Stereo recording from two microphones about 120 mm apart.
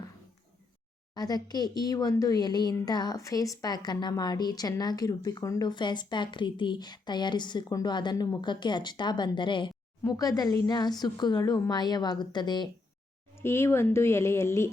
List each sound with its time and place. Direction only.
1.1 s a woman's voice: 35° left (ahead or behind)
10.1 s a woman's voice: 30° left (ahead or behind)
13.3 s speech: 20° left (ahead or behind)